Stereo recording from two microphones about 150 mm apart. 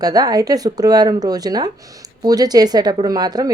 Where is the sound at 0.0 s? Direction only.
25° right (ahead or behind).